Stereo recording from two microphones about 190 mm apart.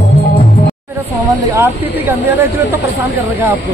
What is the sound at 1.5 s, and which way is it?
Speech, 15° right (ahead or behind).